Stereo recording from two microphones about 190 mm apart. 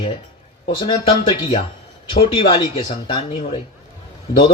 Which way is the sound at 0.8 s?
25° left (ahead or behind).